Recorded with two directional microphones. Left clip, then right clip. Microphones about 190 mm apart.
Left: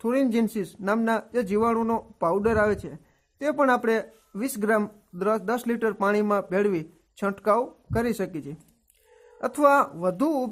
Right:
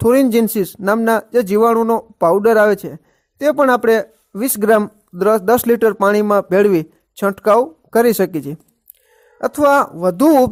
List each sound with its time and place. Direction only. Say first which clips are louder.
0.0 s speech: right 12 dB; 45° right (ahead or behind)
9.4 s speech: right 7 dB; 30° right (ahead or behind); by 10.5 s 45° right (ahead or behind)